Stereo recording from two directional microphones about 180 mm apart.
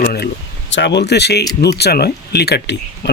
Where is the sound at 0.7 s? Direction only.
80° left.